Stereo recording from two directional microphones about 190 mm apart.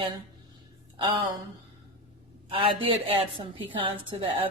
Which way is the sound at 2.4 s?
30° right (ahead or behind).